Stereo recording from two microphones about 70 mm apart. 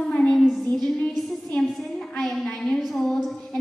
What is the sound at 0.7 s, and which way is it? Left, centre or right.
Music, centre.